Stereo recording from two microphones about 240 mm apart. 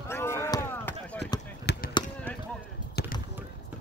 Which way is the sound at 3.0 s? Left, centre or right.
Left.